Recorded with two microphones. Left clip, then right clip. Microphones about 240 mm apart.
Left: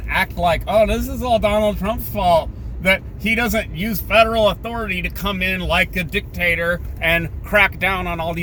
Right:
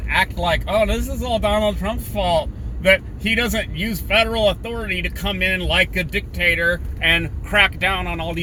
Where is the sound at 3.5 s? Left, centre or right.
Centre.